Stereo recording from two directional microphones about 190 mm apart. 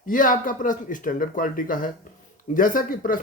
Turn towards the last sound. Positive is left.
turn(degrees=50)  # may be behind; listen again after turning